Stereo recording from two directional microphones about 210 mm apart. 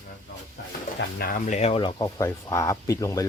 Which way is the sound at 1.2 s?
40° left (ahead or behind).